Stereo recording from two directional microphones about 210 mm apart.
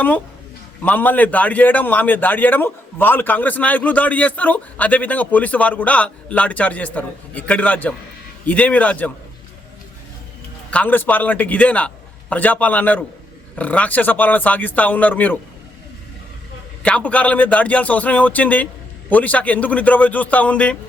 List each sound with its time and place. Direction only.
0.8 s a man's voice: 10° left (ahead or behind)
10.7 s a man's voice: 5° left (ahead or behind)
16.8 s a man's voice: 5° left (ahead or behind)